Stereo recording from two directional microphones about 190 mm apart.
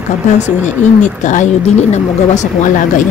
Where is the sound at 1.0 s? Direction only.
40° left (ahead or behind).